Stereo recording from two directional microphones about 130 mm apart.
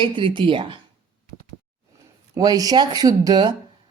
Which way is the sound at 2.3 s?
30° right (ahead or behind).